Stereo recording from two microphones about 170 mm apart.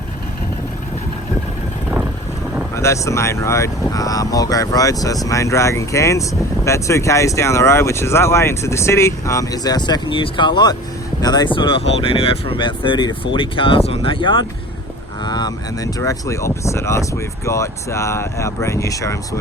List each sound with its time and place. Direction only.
2.7 s speech: 15° left (ahead or behind)